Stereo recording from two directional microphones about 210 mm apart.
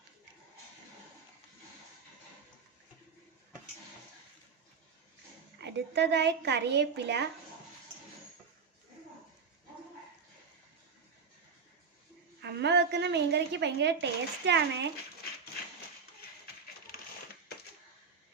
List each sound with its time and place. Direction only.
5.5 s a woman's voice: 55° right (ahead or behind)
12.4 s a woman's voice: 55° right (ahead or behind)